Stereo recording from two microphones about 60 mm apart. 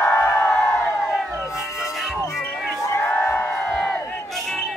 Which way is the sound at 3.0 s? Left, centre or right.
Left.